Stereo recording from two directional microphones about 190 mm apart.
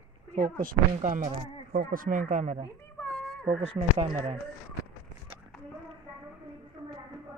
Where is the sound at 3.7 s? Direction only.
30° right (ahead or behind).